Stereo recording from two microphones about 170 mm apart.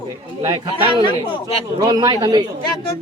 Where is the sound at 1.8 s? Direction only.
25° right (ahead or behind).